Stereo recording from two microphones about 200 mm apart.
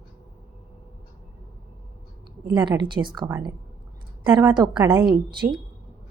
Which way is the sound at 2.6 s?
25° right (ahead or behind).